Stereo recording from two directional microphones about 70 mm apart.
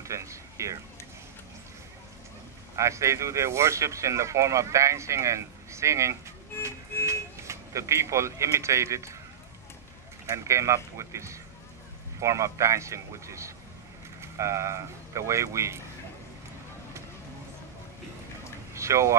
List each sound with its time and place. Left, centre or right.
0.0 s speech: right
2.7 s speech: right
10.2 s speech: right
18.7 s a sound: right